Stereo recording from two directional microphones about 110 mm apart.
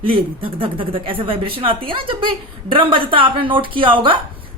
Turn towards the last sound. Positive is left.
turn(degrees=-50)  # may be behind; listen again after turning